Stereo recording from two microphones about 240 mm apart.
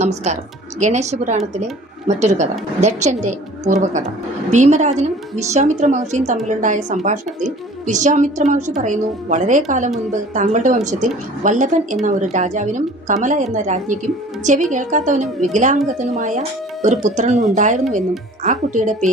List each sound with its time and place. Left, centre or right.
0.0 s a woman's voice: right